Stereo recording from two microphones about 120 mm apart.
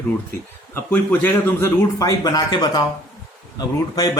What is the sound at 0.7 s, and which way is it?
A man's voice, 15° left (ahead or behind).